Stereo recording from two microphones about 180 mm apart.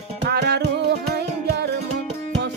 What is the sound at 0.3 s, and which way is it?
Music, 65° right (ahead or behind).